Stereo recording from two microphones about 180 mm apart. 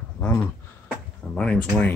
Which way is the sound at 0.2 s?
10° left (ahead or behind).